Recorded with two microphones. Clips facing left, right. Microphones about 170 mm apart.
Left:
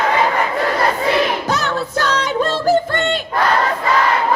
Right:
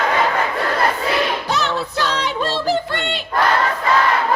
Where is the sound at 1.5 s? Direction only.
Centre (ahead or behind).